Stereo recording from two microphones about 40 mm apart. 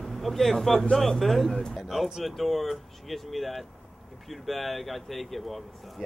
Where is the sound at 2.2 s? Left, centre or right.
Centre.